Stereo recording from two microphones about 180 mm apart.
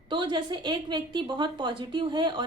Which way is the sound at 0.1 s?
25° right (ahead or behind).